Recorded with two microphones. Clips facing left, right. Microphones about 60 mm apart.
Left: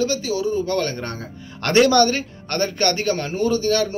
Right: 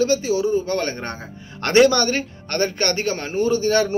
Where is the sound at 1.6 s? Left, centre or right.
Centre.